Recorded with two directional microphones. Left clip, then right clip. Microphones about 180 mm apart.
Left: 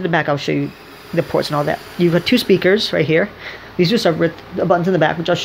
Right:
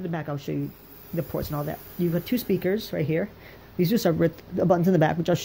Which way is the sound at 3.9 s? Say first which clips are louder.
Left 5 dB; 30° right (ahead or behind).